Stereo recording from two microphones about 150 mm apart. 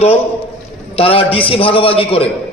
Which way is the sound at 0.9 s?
40° left (ahead or behind).